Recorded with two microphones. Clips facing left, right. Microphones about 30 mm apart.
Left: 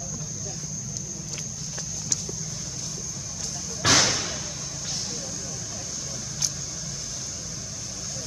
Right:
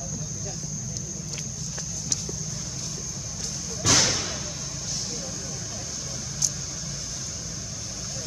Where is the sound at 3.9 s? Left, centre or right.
Centre.